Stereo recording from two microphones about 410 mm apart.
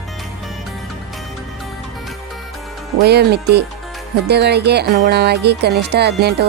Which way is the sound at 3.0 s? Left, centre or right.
Right.